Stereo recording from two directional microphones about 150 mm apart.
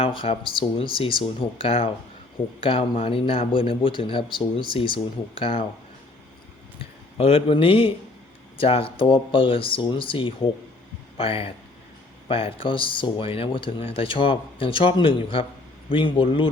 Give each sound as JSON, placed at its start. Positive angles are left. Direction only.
{"t": 0.0, "sound": "speech", "side_deg": 35}
{"t": 7.2, "sound": "speech", "side_deg": 40}